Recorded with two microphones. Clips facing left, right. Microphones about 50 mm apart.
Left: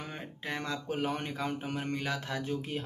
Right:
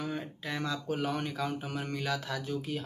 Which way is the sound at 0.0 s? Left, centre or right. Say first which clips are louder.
Right 4 dB; left.